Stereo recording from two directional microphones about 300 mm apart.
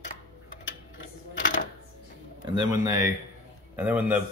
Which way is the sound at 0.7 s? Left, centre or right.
Left.